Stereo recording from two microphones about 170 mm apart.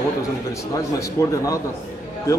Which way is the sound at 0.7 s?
20° left (ahead or behind).